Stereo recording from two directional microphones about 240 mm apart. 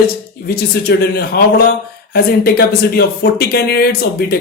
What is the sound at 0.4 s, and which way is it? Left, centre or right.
Speech, left.